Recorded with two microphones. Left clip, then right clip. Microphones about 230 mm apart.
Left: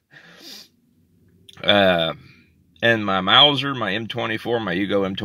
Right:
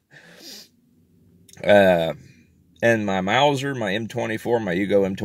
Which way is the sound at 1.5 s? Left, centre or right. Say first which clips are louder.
Right 1 dB; centre.